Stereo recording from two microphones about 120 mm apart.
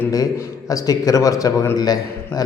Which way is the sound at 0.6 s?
30° left (ahead or behind).